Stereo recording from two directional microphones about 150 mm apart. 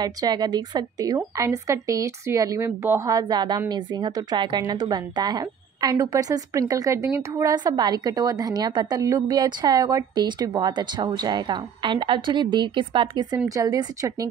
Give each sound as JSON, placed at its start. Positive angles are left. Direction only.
{"t": 0.0, "sound": "a woman's voice", "side_deg": -25}